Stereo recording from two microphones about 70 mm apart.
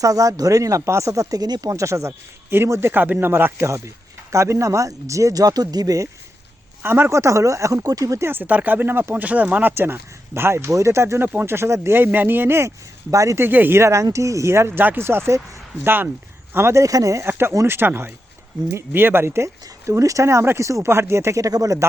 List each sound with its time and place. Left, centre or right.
0.0 s speech: right
1.7 s speech: right
2.9 s speech: right
3.7 s speech: right
6.8 s speech: right
8.2 s speech: right
13.1 s speech: right
13.4 s speech: right
16.8 s speech: right